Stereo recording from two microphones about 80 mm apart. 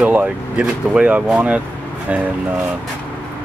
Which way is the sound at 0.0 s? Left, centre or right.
Centre.